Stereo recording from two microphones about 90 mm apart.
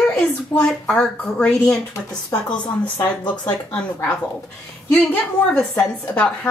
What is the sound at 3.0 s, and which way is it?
Speech, 45° left (ahead or behind).